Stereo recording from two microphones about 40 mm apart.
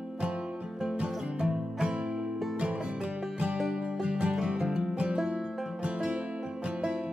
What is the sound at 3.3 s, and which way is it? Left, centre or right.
Music, right.